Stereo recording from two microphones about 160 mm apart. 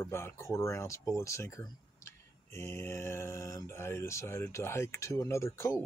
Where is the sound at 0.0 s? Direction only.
15° left (ahead or behind).